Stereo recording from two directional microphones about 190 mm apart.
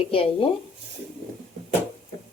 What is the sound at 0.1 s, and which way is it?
Speech, 30° left (ahead or behind).